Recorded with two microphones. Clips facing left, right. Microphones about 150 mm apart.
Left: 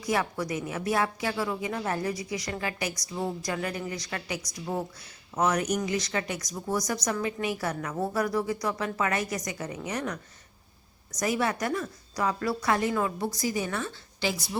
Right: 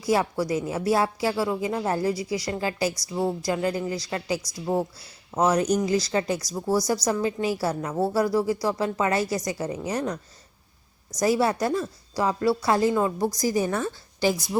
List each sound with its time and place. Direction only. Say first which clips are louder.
0.0 s speech: right 5 dB; 30° right (ahead or behind)
11.2 s speech: right 6 dB; 35° right (ahead or behind)
13.1 s a woman's voice: right 6 dB; 40° right (ahead or behind)